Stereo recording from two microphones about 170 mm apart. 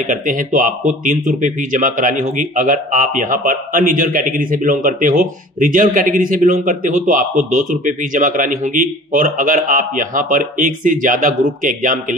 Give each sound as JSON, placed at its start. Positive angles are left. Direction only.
{"t": 0.0, "sound": "speech", "side_deg": -50}